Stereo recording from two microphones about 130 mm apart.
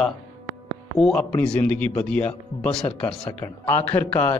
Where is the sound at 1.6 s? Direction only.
10° left (ahead or behind).